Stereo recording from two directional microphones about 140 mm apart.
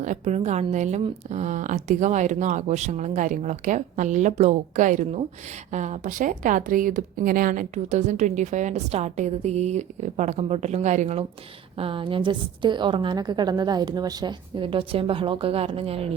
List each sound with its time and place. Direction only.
0.0 s speech: 60° right (ahead or behind)
11.8 s a woman's voice: 40° right (ahead or behind)